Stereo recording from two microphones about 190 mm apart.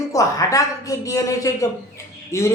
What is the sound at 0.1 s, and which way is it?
Speech, 15° left (ahead or behind).